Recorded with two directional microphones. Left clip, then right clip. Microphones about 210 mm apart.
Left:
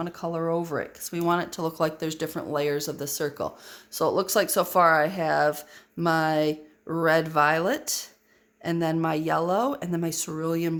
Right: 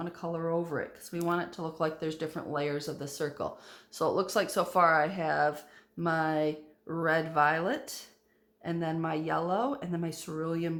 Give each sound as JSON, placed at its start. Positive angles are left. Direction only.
{"t": 0.0, "sound": "speech", "side_deg": 45}